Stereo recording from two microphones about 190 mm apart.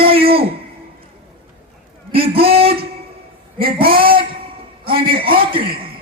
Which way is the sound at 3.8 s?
30° right (ahead or behind).